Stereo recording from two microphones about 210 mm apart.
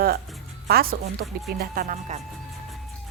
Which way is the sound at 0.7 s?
45° right (ahead or behind).